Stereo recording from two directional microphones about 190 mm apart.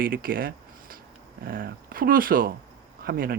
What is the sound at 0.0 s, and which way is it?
Speech, 50° right (ahead or behind).